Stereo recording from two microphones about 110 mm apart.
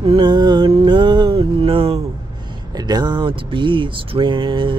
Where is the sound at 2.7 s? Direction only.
40° right (ahead or behind).